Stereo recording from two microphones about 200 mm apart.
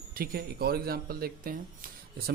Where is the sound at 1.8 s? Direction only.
45° right (ahead or behind).